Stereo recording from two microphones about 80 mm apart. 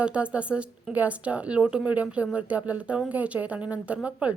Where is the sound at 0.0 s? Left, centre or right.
Centre.